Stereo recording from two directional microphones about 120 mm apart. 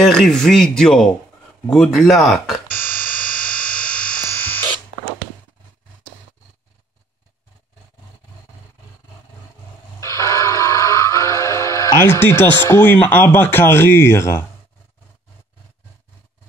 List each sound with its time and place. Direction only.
0.0 s speech: 5° left (ahead or behind)
2.8 s music: 15° left (ahead or behind)
9.9 s music: 25° left (ahead or behind)